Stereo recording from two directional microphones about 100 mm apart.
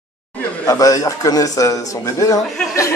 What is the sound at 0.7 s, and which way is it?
Speech, 35° left (ahead or behind).